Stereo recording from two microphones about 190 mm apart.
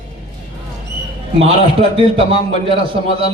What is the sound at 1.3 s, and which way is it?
A man's voice, 30° right (ahead or behind).